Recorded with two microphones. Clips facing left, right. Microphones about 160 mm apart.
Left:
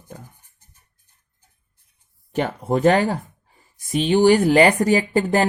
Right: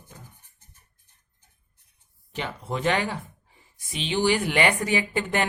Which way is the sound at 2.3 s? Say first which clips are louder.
Left 10 dB; 50° left (ahead or behind).